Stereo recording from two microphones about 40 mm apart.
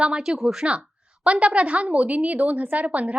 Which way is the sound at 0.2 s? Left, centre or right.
Centre.